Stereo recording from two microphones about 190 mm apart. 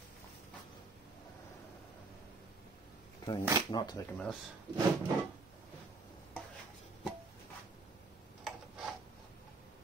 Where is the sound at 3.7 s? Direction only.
20° left (ahead or behind).